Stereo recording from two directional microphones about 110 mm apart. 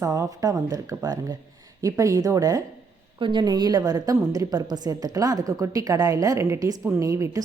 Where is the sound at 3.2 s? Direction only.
45° right (ahead or behind).